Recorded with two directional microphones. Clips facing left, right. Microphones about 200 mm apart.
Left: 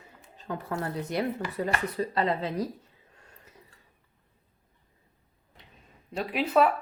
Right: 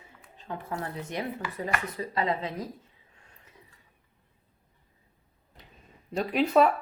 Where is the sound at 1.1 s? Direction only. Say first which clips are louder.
Left 5 dB; 35° left (ahead or behind).